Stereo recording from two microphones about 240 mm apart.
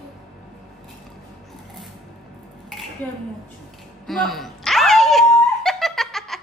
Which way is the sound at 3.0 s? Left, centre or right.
Centre.